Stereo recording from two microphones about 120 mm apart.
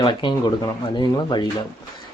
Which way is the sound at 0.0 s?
40° left (ahead or behind).